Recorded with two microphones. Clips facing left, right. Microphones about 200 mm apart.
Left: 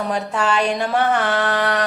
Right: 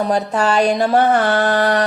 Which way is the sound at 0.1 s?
40° right (ahead or behind).